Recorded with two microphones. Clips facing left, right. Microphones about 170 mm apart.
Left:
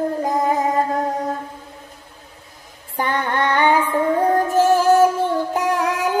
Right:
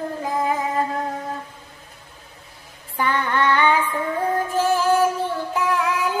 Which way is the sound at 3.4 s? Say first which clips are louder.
Left 3 dB; 45° left (ahead or behind).